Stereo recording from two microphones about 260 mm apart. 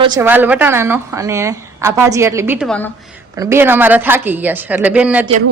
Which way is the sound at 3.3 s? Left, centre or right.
Centre.